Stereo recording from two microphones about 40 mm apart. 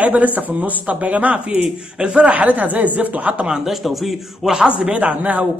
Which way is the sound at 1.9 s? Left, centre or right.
Right.